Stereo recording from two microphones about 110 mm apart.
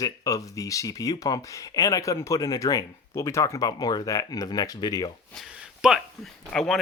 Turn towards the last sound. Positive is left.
turn(degrees=5)  # may be behind; listen again after turning